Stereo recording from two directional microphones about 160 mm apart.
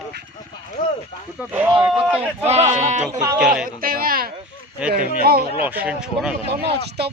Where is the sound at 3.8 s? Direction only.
65° right (ahead or behind).